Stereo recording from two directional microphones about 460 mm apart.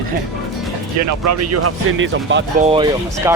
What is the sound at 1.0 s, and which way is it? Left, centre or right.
Speech, right.